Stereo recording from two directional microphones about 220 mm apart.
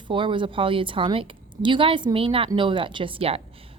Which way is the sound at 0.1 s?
20° right (ahead or behind).